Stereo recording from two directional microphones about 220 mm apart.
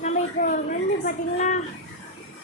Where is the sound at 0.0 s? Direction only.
35° left (ahead or behind).